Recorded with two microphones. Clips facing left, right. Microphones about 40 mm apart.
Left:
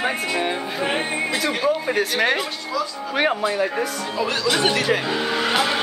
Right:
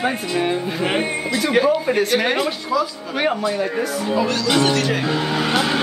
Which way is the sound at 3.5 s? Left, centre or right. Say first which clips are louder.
Right 1 dB; centre.